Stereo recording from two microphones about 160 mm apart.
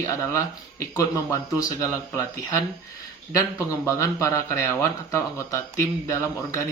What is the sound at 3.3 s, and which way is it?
Speech, 20° left (ahead or behind).